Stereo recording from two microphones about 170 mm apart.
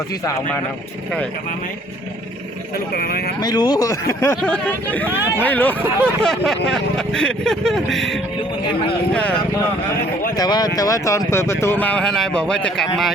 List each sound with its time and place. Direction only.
0.3 s speech: 20° left (ahead or behind)
2.7 s speech: 65° left (ahead or behind)
3.4 s speech: 25° left (ahead or behind); by 8.2 s centre (ahead or behind)
10.3 s speech: 25° left (ahead or behind); by 13.1 s centre (ahead or behind)